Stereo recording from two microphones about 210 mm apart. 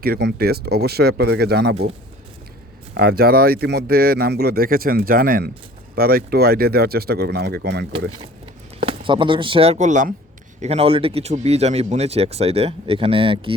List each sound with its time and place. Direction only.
0.0 s speech: 50° right (ahead or behind)
2.9 s speech: 50° right (ahead or behind)
8.8 s speech: 25° right (ahead or behind)